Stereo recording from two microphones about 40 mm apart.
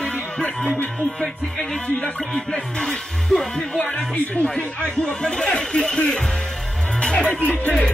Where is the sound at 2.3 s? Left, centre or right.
Left.